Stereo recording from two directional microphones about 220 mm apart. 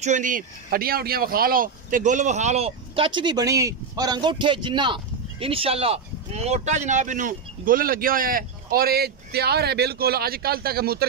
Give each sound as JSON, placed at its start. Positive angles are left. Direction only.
{"t": 0.0, "sound": "speech", "side_deg": -35}